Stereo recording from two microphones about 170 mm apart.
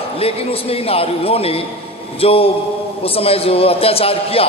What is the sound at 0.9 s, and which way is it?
A man's voice, 35° left (ahead or behind).